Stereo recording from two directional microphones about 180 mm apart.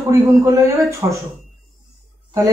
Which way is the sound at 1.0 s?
15° right (ahead or behind).